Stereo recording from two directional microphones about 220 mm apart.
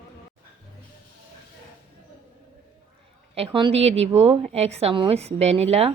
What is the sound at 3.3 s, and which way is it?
A woman's voice, 25° right (ahead or behind).